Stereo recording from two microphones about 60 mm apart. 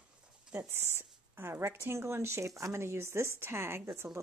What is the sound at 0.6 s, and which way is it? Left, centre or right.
Speech, right.